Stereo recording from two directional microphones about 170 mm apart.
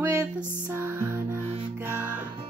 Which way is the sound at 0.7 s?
15° right (ahead or behind).